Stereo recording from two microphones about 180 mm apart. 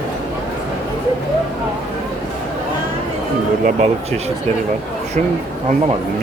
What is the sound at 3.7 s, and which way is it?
Speech, 40° right (ahead or behind).